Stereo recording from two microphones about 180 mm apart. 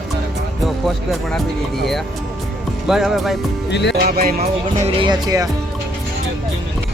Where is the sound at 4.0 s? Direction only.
55° right (ahead or behind).